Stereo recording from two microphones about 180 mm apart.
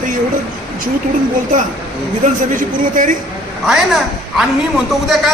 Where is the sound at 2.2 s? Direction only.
45° right (ahead or behind).